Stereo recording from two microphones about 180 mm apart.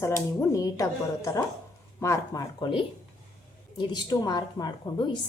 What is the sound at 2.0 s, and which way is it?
A woman's voice, 20° left (ahead or behind).